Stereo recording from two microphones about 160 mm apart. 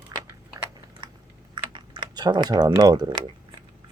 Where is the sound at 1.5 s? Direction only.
25° right (ahead or behind).